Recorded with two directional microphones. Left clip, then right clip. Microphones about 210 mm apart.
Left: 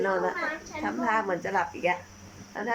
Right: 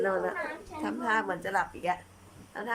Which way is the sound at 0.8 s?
Centre (ahead or behind).